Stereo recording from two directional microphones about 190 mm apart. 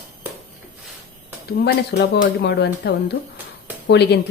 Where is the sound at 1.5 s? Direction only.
55° left (ahead or behind).